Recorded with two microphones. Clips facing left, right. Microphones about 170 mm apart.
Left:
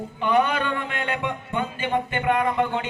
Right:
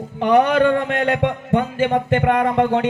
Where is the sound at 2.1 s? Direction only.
60° right (ahead or behind).